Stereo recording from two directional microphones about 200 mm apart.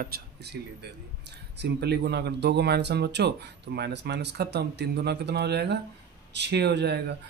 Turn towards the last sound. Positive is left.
turn(degrees=-55)  # may be behind; listen again after turning